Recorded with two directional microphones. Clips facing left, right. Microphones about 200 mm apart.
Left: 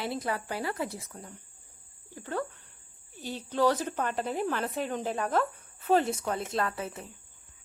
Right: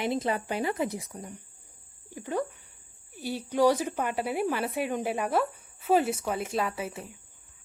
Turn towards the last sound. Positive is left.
turn(degrees=-10)  # may be behind; listen again after turning